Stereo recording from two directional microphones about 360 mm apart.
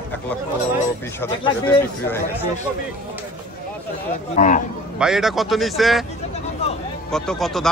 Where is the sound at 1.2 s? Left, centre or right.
Centre.